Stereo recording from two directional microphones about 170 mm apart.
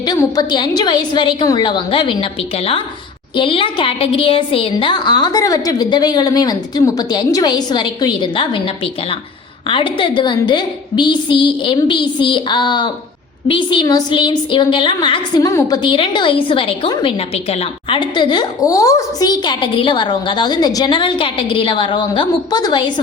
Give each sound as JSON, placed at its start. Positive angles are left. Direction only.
{"t": 0.2, "sound": "a woman's voice", "side_deg": 25}